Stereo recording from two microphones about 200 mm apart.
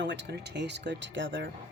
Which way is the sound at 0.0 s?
60° right (ahead or behind).